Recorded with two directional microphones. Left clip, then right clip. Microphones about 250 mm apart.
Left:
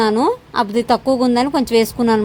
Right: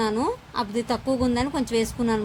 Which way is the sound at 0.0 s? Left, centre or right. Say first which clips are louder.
Left 9 dB; left.